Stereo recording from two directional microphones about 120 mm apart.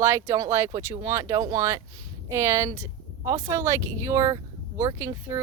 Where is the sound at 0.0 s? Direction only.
25° right (ahead or behind).